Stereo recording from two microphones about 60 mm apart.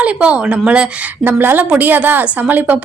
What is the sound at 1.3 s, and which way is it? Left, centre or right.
A woman's voice, right.